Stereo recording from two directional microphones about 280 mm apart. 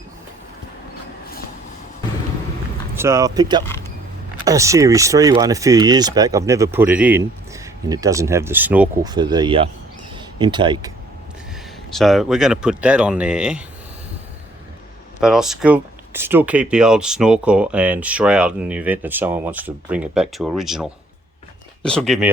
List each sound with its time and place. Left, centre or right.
2.9 s speech: centre
3.6 s a sound: centre
4.4 s speech: centre
11.9 s speech: centre
15.2 s speech: centre